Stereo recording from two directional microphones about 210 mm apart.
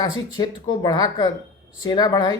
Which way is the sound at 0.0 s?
20° left (ahead or behind).